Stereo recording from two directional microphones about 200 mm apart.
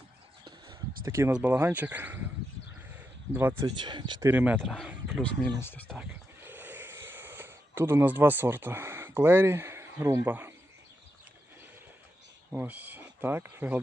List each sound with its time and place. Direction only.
1.0 s speech: 15° right (ahead or behind)
2.9 s a sound: 10° right (ahead or behind)
3.8 s speech: 25° right (ahead or behind)
4.3 s speech: 10° right (ahead or behind)
5.5 s speech: 10° left (ahead or behind)
6.0 s a sound: 10° right (ahead or behind)
12.5 s speech: 10° right (ahead or behind)